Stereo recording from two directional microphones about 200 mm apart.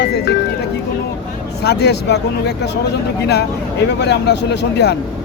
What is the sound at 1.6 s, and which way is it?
Speech, 55° left (ahead or behind).